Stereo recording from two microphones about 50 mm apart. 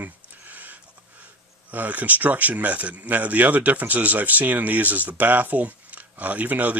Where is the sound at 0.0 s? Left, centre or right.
Right.